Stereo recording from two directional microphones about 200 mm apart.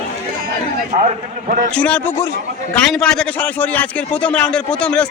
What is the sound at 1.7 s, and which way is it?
A man's voice, 5° left (ahead or behind).